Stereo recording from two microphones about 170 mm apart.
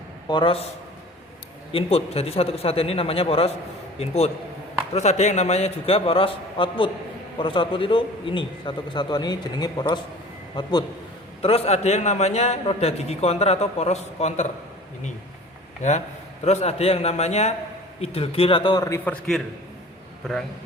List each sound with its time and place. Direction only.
0.3 s a man's voice: 30° left (ahead or behind)
1.7 s a man's voice: 35° left (ahead or behind)
11.4 s a man's voice: 35° left (ahead or behind)
15.8 s a man's voice: 40° left (ahead or behind); by 19.4 s 10° left (ahead or behind)